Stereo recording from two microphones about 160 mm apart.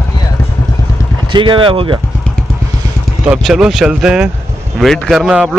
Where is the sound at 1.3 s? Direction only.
30° right (ahead or behind).